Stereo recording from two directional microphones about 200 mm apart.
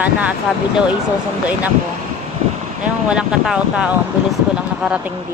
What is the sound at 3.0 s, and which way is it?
Speech, 5° right (ahead or behind).